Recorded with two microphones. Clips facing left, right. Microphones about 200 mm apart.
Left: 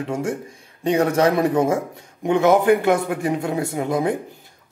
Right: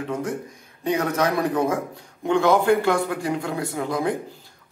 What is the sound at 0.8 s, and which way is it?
A man's voice, 30° left (ahead or behind).